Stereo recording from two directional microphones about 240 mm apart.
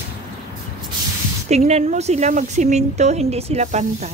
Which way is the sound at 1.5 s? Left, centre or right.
Right.